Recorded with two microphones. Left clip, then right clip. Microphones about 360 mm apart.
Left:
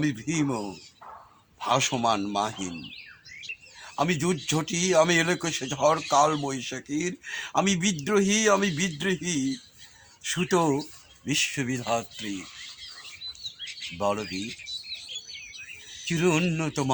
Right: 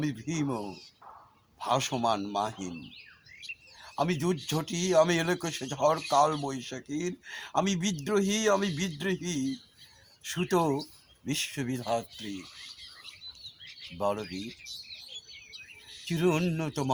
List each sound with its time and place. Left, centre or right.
0.0 s speech: right
3.8 s speech: right
14.0 s speech: right
16.0 s speech: right